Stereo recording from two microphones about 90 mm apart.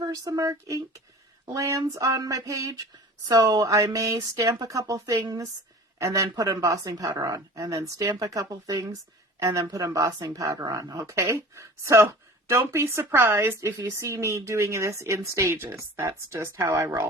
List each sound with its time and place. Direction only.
0.0 s speech: 40° right (ahead or behind)